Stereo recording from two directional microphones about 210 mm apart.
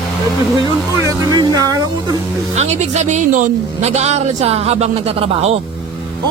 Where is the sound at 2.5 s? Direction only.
30° right (ahead or behind).